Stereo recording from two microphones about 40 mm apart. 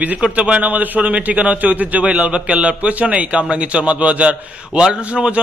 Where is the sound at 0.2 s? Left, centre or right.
Right.